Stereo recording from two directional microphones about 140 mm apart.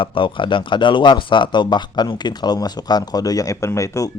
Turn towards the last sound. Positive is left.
turn(degrees=25)  # may be behind; listen again after turning